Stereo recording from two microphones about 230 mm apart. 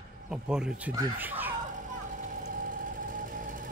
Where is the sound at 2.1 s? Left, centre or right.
Right.